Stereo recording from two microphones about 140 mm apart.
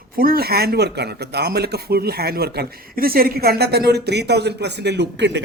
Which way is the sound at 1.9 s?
90° right.